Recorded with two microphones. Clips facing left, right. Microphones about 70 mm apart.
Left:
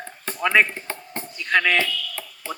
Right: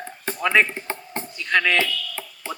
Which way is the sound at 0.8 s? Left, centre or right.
Right.